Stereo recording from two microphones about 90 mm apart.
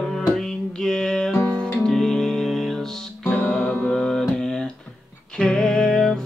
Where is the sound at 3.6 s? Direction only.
10° left (ahead or behind).